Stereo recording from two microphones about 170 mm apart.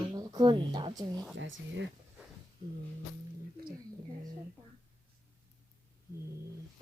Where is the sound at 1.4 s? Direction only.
90° right.